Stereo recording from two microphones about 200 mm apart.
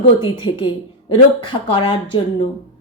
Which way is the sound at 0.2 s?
25° left (ahead or behind).